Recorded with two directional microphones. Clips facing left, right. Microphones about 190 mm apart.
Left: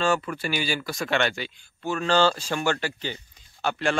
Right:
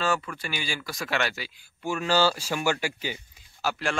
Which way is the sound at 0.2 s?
30° left (ahead or behind).